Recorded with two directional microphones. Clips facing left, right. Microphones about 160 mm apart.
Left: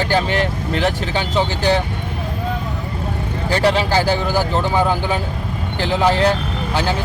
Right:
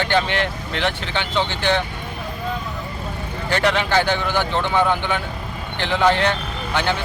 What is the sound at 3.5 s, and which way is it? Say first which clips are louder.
Speech: left 3 dB; 35° left (ahead or behind).